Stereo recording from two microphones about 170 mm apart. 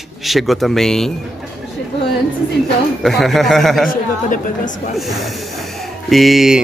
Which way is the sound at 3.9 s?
50° left (ahead or behind).